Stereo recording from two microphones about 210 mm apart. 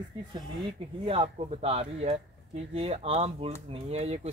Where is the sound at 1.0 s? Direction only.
25° right (ahead or behind).